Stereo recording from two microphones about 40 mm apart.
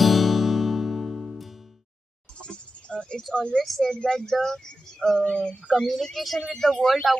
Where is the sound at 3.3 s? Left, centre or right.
Left.